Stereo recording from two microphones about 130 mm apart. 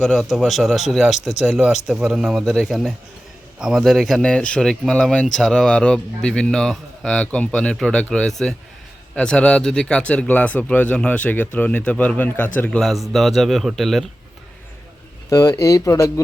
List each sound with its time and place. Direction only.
0.0 s speech: centre (ahead or behind)
12.8 s speech: centre (ahead or behind)
15.3 s speech: 25° left (ahead or behind)